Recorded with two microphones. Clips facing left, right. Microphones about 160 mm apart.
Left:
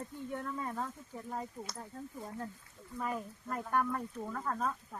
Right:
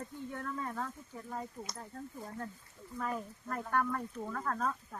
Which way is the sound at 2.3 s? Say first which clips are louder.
Left 1 dB; 15° left (ahead or behind).